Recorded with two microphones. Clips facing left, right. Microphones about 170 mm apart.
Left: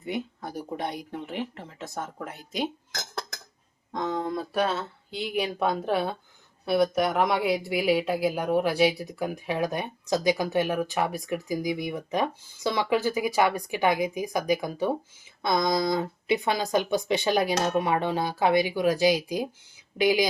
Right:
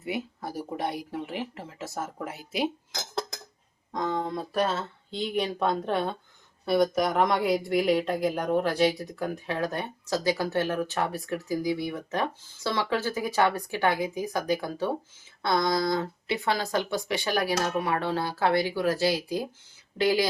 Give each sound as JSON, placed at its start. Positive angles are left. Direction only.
{"t": 0.0, "sound": "speech", "side_deg": -5}
{"t": 3.9, "sound": "speech", "side_deg": 0}